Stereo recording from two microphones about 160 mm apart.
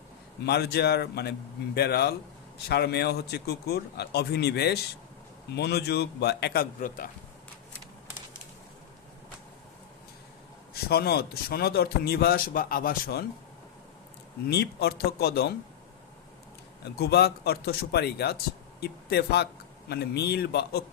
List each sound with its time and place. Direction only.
0.4 s a man's voice: 90° left; by 7.1 s 60° left (ahead or behind)
10.8 s speech: 80° left
14.5 s speech: 85° left
16.8 s a man's voice: 90° left